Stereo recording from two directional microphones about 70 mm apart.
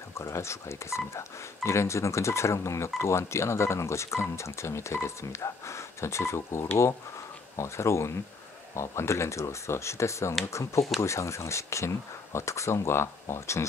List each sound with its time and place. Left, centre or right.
0.2 s speech: left